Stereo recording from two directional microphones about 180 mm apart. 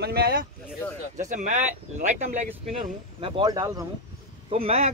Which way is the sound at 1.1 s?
40° right (ahead or behind).